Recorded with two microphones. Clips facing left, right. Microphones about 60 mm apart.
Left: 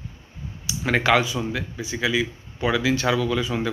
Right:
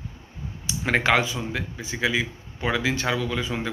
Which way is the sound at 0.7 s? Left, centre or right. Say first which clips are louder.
Left 2 dB; right.